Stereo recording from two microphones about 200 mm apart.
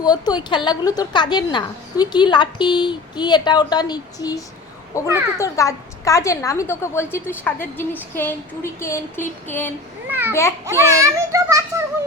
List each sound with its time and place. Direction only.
0.0 s a woman's voice: 20° left (ahead or behind)
10.1 s a child's voice: 10° right (ahead or behind)